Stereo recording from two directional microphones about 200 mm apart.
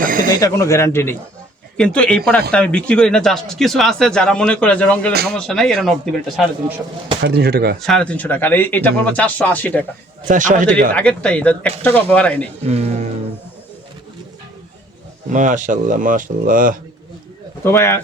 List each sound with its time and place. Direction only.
0.0 s a sound: 45° right (ahead or behind)
0.3 s speech: 15° left (ahead or behind); by 6.7 s centre (ahead or behind)
7.3 s speech: 55° right (ahead or behind)
7.8 s speech: 5° left (ahead or behind)
10.2 s speech: 40° right (ahead or behind)
10.9 s speech: 5° left (ahead or behind)
12.6 s speech: 30° right (ahead or behind)
15.3 s speech: 40° right (ahead or behind)
17.6 s speech: 15° left (ahead or behind)